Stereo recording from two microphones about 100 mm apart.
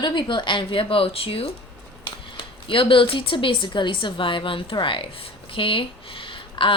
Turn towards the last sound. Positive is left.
turn(degrees=55)  # may be behind; listen again after turning